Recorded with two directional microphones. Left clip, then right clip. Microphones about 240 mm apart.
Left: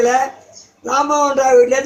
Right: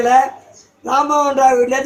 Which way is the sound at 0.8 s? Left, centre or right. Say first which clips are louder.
Even; centre.